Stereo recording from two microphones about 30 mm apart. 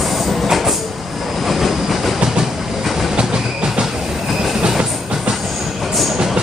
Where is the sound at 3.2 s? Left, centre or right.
Right.